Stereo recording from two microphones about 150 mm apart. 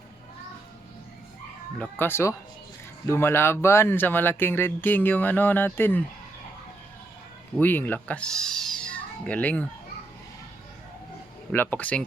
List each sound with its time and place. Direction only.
1.8 s speech: 15° left (ahead or behind)
7.6 s speech: 10° left (ahead or behind)
11.5 s speech: 15° left (ahead or behind)